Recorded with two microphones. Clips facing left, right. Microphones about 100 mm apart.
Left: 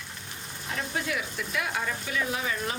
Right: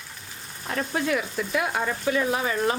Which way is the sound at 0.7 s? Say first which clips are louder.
Right 6 dB; 50° right (ahead or behind).